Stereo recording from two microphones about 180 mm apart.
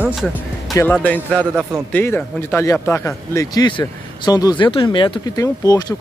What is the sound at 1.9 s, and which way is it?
Speech, 10° left (ahead or behind).